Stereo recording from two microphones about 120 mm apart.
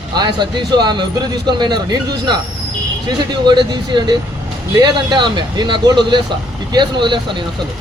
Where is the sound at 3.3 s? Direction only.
40° right (ahead or behind).